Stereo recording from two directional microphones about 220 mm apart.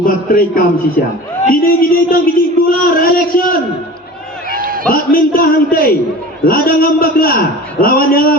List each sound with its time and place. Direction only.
0.0 s a man's voice: 40° left (ahead or behind)
4.5 s a sound: 40° right (ahead or behind)
4.9 s a man's voice: 40° left (ahead or behind)